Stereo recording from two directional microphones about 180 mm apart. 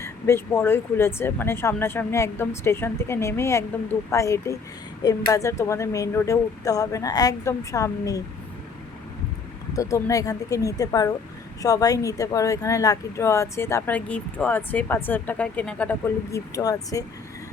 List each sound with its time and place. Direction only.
0.0 s speech: 15° left (ahead or behind)
9.7 s speech: 20° left (ahead or behind)